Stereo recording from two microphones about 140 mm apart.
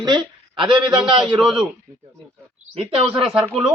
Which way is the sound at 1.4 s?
5° right (ahead or behind).